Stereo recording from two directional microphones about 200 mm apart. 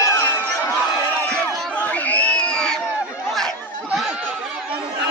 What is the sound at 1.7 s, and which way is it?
Crowd, 10° left (ahead or behind).